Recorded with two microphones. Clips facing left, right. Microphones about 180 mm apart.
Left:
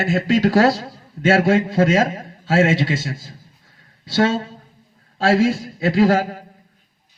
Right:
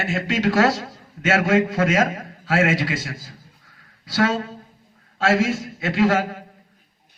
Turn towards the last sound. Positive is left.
turn(degrees=35)  # may be behind; listen again after turning